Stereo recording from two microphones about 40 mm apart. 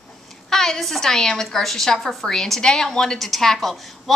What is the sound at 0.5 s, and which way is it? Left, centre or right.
A woman's voice, centre.